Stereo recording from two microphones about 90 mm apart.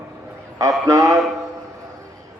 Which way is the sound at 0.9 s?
40° right (ahead or behind).